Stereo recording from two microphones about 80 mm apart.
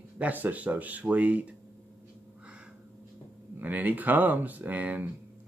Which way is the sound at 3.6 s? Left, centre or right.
Right.